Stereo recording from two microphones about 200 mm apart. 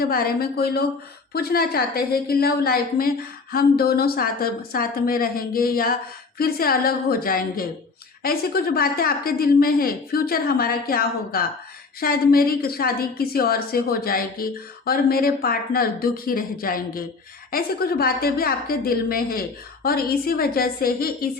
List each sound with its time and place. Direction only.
0.0 s a woman's voice: 50° left (ahead or behind)